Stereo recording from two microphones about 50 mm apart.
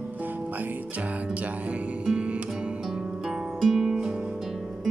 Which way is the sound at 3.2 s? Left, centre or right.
Centre.